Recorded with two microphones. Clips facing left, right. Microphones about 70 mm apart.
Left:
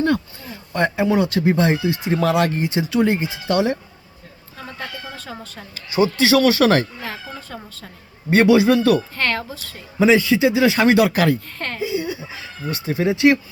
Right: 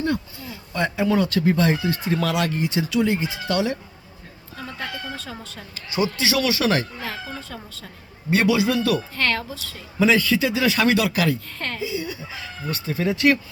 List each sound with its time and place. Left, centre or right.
0.4 s a sound: left
0.9 s a man's voice: left
2.2 s a man's voice: left
5.1 s speech: centre
5.7 s speech: left
7.0 s speech: centre
8.3 s speech: left
9.1 s speech: centre
10.0 s a man's voice: centre; by 11.3 s left
11.8 s giggle: left
12.2 s speech: left